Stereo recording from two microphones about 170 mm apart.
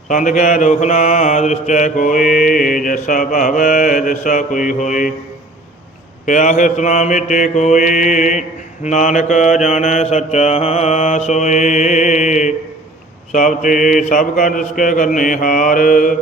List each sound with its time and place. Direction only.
0.1 s mantra: 50° left (ahead or behind)
6.2 s mantra: 45° left (ahead or behind)